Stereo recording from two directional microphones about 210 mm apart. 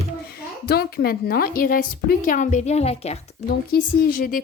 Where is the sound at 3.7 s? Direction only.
45° left (ahead or behind).